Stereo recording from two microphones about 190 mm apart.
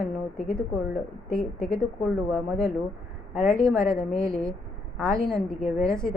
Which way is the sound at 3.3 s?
15° right (ahead or behind).